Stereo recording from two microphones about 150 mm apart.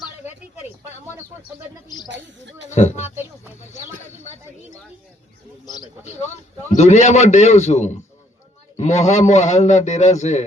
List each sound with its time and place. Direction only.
2.6 s a man's voice: 50° left (ahead or behind)
5.6 s speech: 25° left (ahead or behind)
6.1 s a man's voice: 50° left (ahead or behind)